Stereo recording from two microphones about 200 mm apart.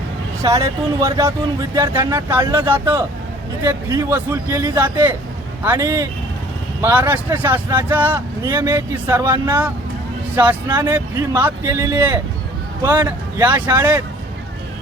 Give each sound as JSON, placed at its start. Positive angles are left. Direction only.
{"t": 0.4, "sound": "a man's voice", "side_deg": -15}